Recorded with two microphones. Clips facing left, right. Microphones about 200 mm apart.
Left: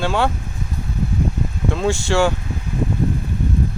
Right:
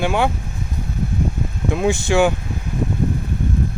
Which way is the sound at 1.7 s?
15° right (ahead or behind).